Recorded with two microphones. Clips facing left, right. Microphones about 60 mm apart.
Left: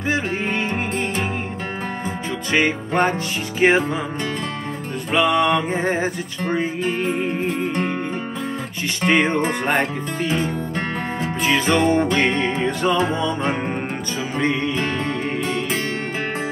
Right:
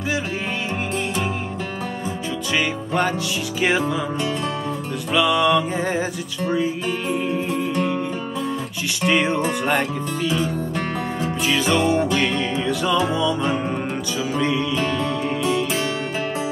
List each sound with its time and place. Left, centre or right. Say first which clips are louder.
2.5 s music: left 3 dB; left
5.1 s music: even; left
9.0 s music: left 2 dB; left